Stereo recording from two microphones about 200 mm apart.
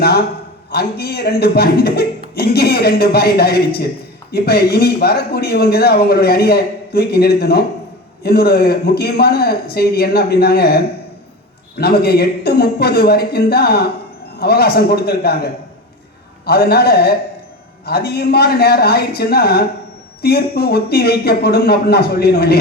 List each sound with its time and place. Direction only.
0.7 s speech: 50° left (ahead or behind)
11.8 s speech: 50° left (ahead or behind)
16.5 s speech: 50° left (ahead or behind)